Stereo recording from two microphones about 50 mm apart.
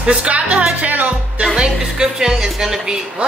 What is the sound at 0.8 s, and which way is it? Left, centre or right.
Music, right.